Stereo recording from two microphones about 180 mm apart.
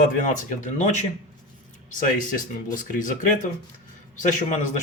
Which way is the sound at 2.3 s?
45° left (ahead or behind).